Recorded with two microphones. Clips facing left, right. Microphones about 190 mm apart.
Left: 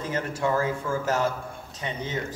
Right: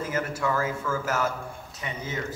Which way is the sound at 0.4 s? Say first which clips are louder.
Left 5 dB; 30° left (ahead or behind).